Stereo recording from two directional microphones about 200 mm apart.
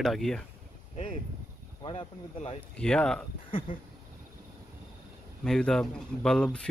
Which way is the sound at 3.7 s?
45° left (ahead or behind).